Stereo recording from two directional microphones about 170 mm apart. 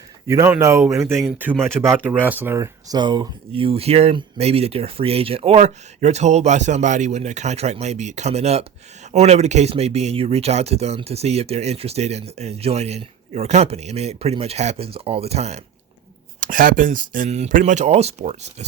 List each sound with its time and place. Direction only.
0.3 s speech: 15° right (ahead or behind); by 15.6 s 40° right (ahead or behind)
16.4 s speech: 55° right (ahead or behind)